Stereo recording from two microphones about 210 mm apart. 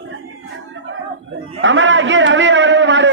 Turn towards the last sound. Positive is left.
turn(degrees=-60)  # may be behind; listen again after turning